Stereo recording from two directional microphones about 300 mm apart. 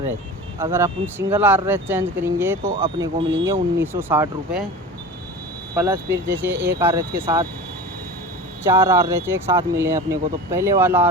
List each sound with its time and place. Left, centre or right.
0.6 s speech: centre
5.7 s speech: centre
8.6 s speech: centre